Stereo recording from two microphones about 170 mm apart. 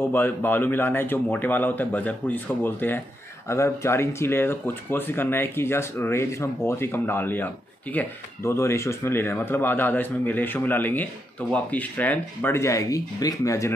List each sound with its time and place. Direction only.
0.0 s speech: 10° left (ahead or behind)